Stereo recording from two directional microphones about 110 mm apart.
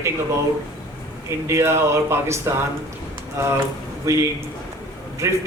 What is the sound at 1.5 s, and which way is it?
A man's voice, 25° right (ahead or behind).